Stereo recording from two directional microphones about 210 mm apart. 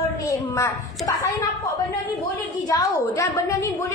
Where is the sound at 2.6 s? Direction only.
15° left (ahead or behind).